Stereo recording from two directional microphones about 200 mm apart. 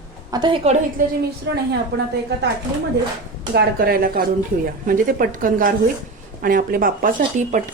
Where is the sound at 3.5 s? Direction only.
50° right (ahead or behind).